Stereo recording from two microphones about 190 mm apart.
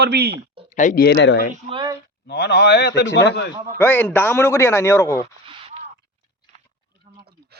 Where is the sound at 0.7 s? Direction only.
40° left (ahead or behind).